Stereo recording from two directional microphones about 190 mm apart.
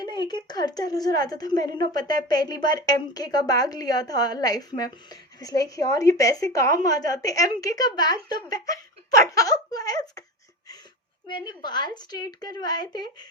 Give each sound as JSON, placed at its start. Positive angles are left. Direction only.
{"t": 0.0, "sound": "a woman's voice", "side_deg": 20}
{"t": 11.3, "sound": "a woman's voice", "side_deg": 25}